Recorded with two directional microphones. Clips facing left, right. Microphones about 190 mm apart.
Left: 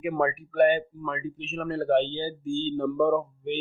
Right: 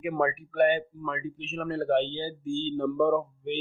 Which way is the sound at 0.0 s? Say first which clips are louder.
Left 1 dB; 40° left (ahead or behind).